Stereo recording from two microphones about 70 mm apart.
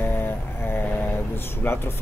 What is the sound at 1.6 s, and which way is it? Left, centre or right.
Speech, left.